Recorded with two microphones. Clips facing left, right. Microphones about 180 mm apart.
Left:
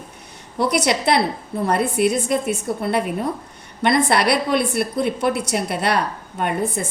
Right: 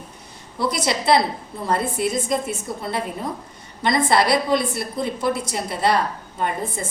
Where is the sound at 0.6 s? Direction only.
65° left (ahead or behind).